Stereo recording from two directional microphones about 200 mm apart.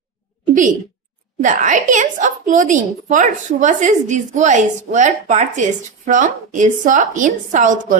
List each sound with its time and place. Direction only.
1.4 s a woman's voice: 40° right (ahead or behind)